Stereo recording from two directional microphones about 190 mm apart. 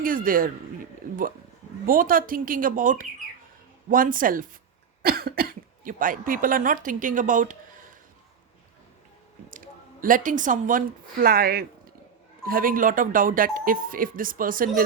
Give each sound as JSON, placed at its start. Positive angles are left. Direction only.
{"t": 0.0, "sound": "speech", "side_deg": -45}
{"t": 1.9, "sound": "speech", "side_deg": -50}
{"t": 9.5, "sound": "a woman's voice", "side_deg": -45}